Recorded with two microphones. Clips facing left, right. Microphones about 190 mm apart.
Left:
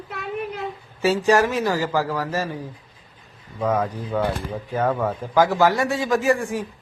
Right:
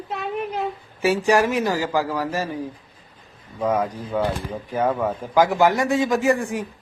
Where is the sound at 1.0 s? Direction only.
15° right (ahead or behind).